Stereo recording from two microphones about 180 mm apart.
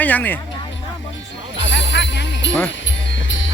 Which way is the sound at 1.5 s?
80° left.